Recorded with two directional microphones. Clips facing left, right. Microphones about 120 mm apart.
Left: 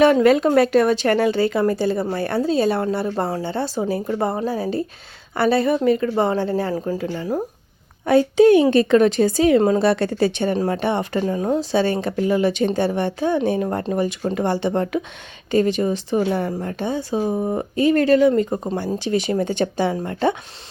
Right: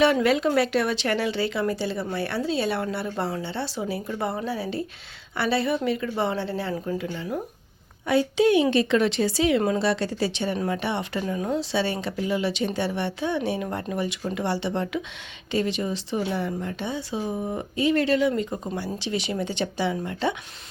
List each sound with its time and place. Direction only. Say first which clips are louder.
0.0 s speech: left 6 dB; 45° left (ahead or behind)